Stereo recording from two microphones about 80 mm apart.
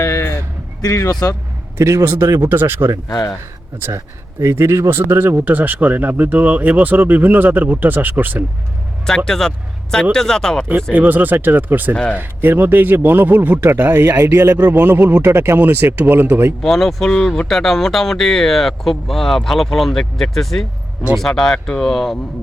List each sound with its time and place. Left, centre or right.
0.0 s a sound: left
0.8 s speech: left
1.8 s a man's voice: right
2.5 s speech: right
3.1 s speech: left
3.9 s speech: right
9.0 s speech: centre
10.9 s speech: right
16.6 s speech: centre